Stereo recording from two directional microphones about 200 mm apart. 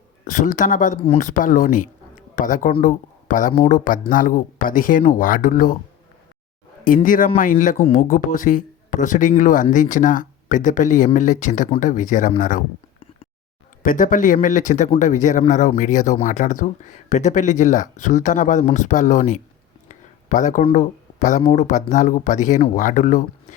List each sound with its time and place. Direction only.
0.3 s speech: 40° left (ahead or behind)
6.8 s speech: 45° left (ahead or behind)
13.8 s speech: 40° left (ahead or behind)
19.9 s a sound: 40° left (ahead or behind)
20.7 s speech: 40° left (ahead or behind)